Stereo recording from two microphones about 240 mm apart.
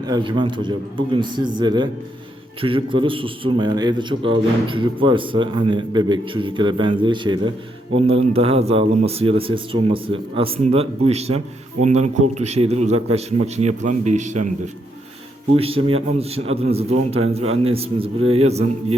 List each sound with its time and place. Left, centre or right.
0.0 s a man's voice: centre
15.5 s a man's voice: right